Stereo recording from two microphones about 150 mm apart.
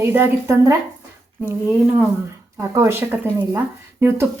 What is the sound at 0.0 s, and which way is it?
Speech, 15° right (ahead or behind).